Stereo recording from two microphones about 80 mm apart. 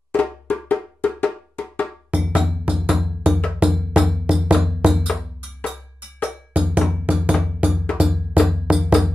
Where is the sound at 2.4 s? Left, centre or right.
Centre.